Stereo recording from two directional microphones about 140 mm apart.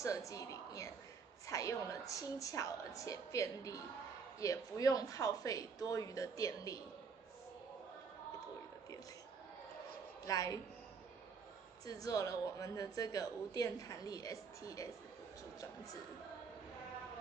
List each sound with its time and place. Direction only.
0.0 s a woman's voice: 25° left (ahead or behind)
10.2 s a woman's voice: 25° left (ahead or behind)
11.8 s a woman's voice: 25° left (ahead or behind)